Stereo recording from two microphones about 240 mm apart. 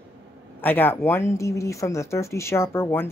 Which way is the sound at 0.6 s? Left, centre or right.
Centre.